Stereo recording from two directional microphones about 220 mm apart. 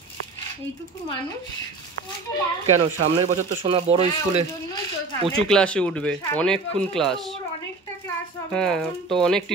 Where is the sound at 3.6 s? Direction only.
25° right (ahead or behind).